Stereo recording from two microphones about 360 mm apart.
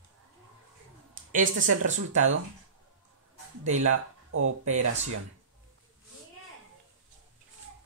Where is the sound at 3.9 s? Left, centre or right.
Right.